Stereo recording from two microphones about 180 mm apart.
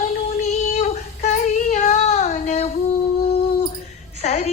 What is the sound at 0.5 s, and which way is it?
Child singing, 40° left (ahead or behind).